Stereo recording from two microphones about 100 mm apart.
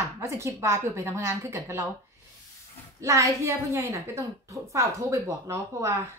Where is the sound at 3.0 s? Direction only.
30° right (ahead or behind).